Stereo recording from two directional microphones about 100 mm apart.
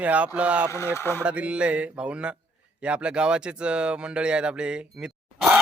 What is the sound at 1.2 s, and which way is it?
Speech, 10° right (ahead or behind).